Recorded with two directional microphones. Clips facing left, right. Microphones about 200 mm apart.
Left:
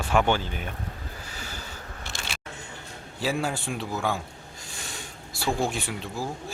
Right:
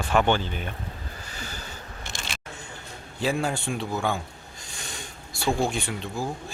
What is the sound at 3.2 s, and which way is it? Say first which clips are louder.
Speech: right 2 dB; 5° left (ahead or behind).